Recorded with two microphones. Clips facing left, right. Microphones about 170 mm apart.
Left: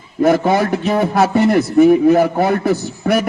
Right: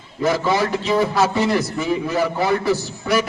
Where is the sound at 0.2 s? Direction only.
55° left (ahead or behind).